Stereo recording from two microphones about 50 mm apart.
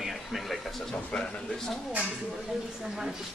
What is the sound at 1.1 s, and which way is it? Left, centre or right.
Speech, centre.